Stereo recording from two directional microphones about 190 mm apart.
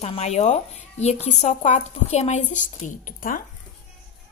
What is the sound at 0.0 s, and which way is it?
A woman's voice, 35° left (ahead or behind).